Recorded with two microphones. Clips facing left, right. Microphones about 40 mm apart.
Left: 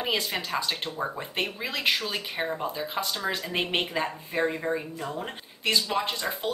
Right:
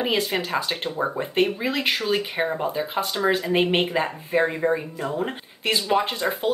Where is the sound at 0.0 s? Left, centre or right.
Centre.